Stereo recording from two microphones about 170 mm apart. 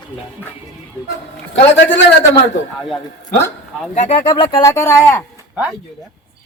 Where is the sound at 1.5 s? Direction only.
90° left.